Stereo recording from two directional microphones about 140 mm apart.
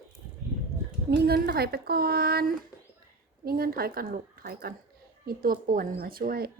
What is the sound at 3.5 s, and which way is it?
Speech, 90° right.